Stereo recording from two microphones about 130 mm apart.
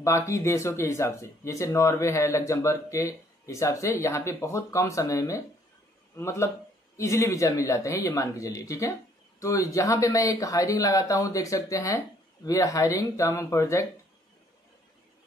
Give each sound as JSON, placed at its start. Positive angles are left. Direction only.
{"t": 0.0, "sound": "speech", "side_deg": 20}